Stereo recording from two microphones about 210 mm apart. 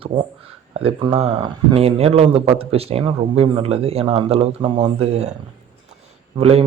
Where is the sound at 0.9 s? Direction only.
30° right (ahead or behind).